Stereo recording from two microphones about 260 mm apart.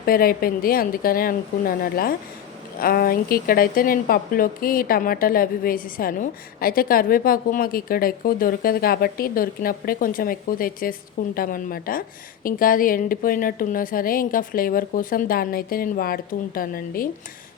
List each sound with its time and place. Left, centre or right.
0.0 s speech: left